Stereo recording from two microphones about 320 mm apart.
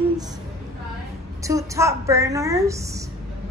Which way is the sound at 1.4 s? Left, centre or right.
Centre.